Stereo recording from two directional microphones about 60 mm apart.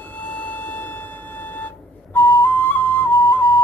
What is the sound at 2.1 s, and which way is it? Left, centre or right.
Flute, left.